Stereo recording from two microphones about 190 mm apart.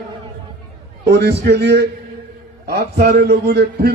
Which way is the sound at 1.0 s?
60° right (ahead or behind).